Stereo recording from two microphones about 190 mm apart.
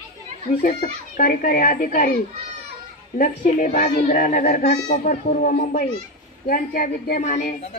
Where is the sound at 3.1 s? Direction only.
45° left (ahead or behind).